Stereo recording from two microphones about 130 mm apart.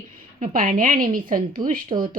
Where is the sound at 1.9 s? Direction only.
45° right (ahead or behind).